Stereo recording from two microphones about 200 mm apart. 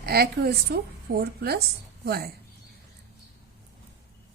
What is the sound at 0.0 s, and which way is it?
A woman's voice, 50° right (ahead or behind).